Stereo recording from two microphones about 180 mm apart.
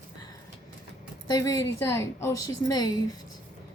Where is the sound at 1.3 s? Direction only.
20° left (ahead or behind).